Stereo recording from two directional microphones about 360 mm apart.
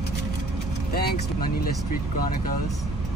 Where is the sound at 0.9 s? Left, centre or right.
Left.